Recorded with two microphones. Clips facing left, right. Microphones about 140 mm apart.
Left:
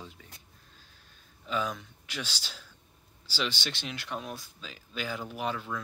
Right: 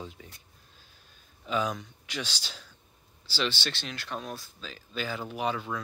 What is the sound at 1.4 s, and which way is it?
Speech, centre (ahead or behind).